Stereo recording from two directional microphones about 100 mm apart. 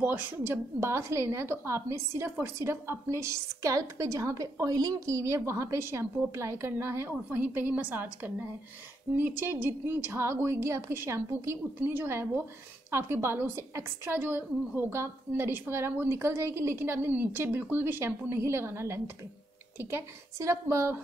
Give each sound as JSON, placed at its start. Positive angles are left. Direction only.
{"t": 0.0, "sound": "a woman's voice", "side_deg": -20}